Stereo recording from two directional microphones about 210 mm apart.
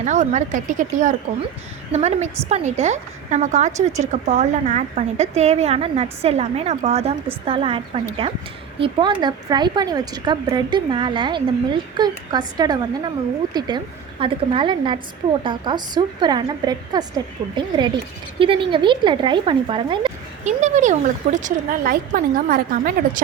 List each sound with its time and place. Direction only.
0.0 s a woman's voice: 35° right (ahead or behind)
20.6 s a woman's voice: 35° right (ahead or behind)